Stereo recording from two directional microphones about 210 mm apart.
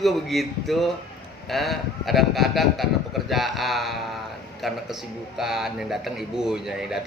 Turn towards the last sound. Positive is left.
turn(degrees=0)  # may be behind; listen again after turning